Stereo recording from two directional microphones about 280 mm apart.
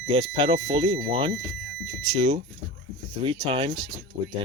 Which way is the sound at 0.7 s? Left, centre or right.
Centre.